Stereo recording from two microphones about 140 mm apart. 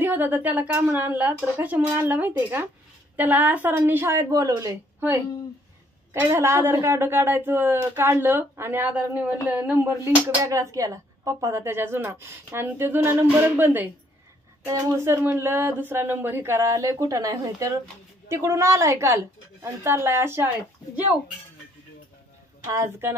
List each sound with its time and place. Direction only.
0.0 s a woman's voice: 15° right (ahead or behind)
22.7 s speech: 20° right (ahead or behind)